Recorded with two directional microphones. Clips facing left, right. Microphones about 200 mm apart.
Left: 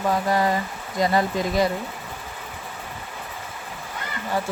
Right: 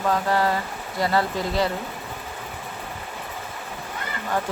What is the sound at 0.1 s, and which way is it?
Speech, 15° left (ahead or behind).